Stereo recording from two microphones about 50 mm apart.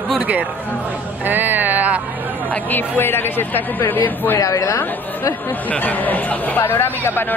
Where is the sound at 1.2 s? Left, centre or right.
Right.